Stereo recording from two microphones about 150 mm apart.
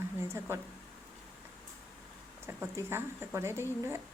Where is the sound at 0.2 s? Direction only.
15° right (ahead or behind).